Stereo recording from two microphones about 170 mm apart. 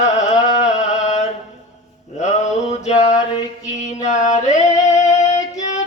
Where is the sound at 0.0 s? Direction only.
45° left (ahead or behind).